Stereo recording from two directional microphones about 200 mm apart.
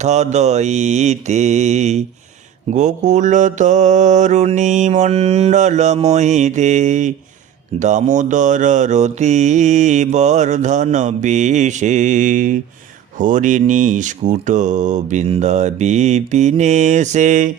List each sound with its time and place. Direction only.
0.0 s mantra: 35° right (ahead or behind)